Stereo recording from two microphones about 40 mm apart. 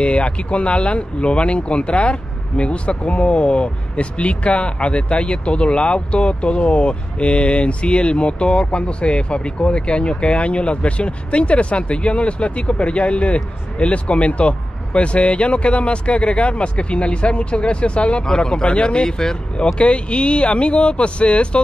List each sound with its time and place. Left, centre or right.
0.0 s speech: left